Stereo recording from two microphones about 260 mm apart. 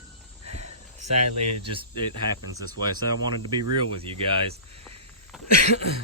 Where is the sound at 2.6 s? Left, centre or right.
Centre.